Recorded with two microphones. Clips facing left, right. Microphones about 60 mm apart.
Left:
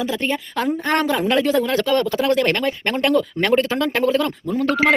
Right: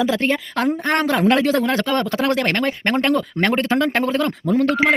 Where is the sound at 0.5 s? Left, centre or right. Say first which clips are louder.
Left 2 dB; right.